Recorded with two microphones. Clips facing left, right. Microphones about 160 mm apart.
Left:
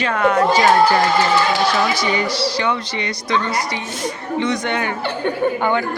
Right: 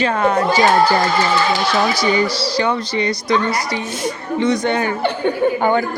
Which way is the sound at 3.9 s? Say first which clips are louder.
Right 2 dB; centre (ahead or behind).